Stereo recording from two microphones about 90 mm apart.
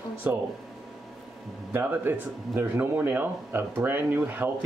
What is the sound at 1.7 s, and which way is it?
Speech, 20° right (ahead or behind).